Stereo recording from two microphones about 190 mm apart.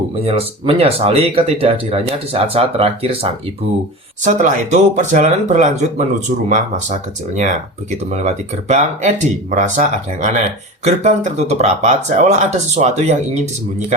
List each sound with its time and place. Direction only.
0.3 s speech: 30° right (ahead or behind)